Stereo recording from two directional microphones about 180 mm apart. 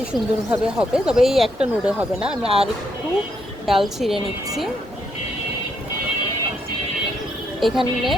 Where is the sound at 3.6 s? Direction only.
Centre (ahead or behind).